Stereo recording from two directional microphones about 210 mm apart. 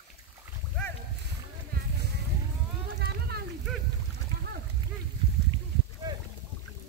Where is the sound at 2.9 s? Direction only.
50° right (ahead or behind).